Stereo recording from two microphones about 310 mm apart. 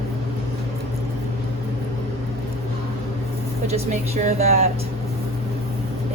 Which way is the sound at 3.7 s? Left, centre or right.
Right.